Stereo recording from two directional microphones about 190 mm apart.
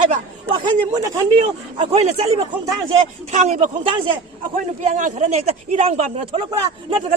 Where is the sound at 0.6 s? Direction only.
20° right (ahead or behind).